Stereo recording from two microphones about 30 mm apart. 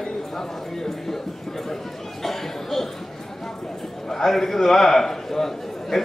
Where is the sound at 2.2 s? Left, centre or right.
Centre.